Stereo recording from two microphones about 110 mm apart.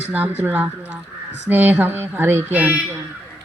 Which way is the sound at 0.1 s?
15° right (ahead or behind).